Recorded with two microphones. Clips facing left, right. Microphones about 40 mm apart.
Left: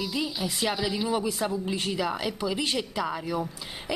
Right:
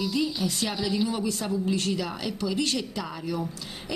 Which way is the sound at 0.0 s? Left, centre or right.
Centre.